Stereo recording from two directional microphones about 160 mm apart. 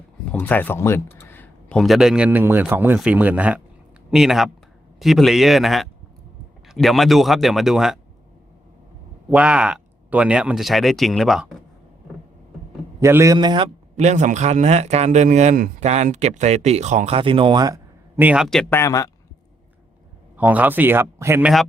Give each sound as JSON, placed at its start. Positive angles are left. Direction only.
{"t": 0.3, "sound": "a sound", "side_deg": 10}
{"t": 1.8, "sound": "speech", "side_deg": 0}
{"t": 9.3, "sound": "speech", "side_deg": -5}
{"t": 13.0, "sound": "a man's voice", "side_deg": -15}
{"t": 13.9, "sound": "speech", "side_deg": -45}
{"t": 18.2, "sound": "speech", "side_deg": -5}
{"t": 18.7, "sound": "a man's voice", "side_deg": 20}
{"t": 20.3, "sound": "speech", "side_deg": -10}